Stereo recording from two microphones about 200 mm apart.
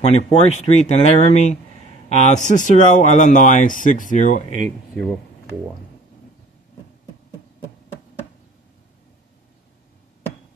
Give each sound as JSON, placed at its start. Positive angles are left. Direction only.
{"t": 0.0, "sound": "speech", "side_deg": 35}
{"t": 4.6, "sound": "speech", "side_deg": 0}